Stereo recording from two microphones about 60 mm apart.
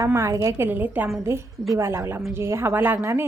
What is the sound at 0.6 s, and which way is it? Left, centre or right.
Speech, right.